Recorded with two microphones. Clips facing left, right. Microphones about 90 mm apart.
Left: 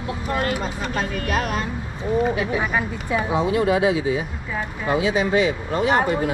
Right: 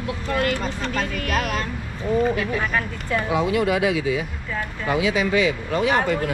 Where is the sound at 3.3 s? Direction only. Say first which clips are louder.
Left 1 dB; 30° left (ahead or behind).